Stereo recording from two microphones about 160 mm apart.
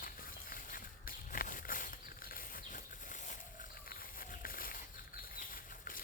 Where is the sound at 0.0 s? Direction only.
60° left (ahead or behind).